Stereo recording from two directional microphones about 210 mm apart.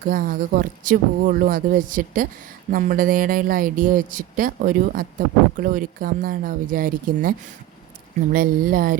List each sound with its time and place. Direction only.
0.0 s speech: 40° right (ahead or behind)